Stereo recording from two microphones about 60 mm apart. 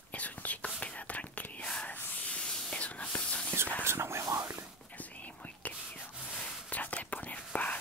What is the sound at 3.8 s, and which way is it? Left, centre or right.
Whispering, right.